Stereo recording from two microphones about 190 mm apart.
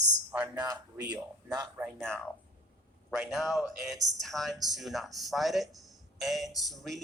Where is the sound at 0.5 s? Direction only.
20° right (ahead or behind).